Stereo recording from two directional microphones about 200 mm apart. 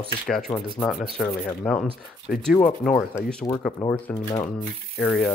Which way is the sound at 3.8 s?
15° left (ahead or behind).